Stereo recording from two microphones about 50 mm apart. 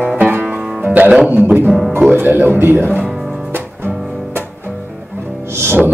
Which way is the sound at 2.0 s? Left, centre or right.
Right.